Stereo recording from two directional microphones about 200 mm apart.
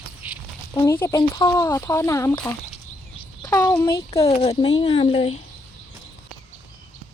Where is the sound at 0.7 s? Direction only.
20° left (ahead or behind).